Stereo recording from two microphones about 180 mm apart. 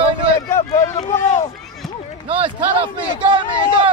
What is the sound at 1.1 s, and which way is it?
Speech, 40° left (ahead or behind).